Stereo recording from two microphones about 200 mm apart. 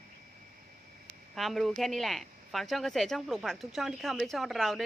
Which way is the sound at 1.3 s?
Centre (ahead or behind).